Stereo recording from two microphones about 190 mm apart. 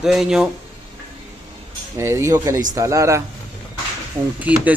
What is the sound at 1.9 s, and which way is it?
Speech, 15° right (ahead or behind).